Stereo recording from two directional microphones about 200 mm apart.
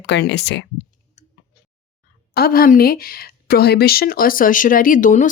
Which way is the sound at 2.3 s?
50° left (ahead or behind).